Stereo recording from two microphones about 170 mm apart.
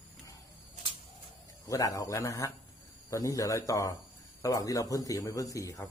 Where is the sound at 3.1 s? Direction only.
20° left (ahead or behind).